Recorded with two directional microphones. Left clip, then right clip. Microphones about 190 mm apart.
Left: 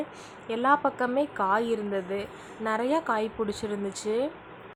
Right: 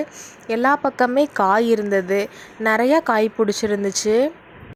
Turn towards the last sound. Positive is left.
turn(degrees=-35)  # may be behind; listen again after turning